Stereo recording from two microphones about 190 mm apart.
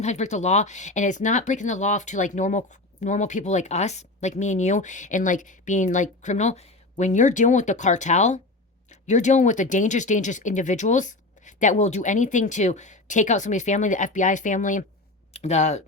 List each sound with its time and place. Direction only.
0.0 s speech: 40° left (ahead or behind)